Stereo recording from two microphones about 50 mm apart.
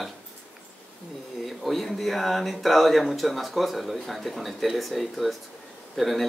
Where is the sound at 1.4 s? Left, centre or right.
Centre.